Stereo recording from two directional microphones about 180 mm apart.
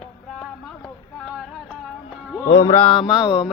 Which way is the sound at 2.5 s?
20° left (ahead or behind).